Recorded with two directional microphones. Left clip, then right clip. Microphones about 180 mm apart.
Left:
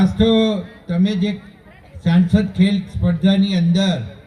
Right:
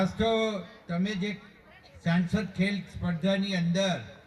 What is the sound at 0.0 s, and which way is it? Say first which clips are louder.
A man's voice: left 10 dB; 60° right (ahead or behind).